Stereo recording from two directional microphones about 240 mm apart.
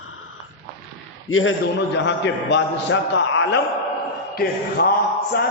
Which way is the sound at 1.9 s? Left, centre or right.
Left.